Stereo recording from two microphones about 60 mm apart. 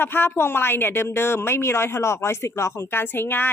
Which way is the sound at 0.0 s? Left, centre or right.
Left.